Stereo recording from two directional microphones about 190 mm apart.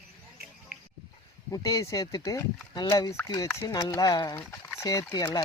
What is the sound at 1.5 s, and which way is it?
Speech, 20° left (ahead or behind).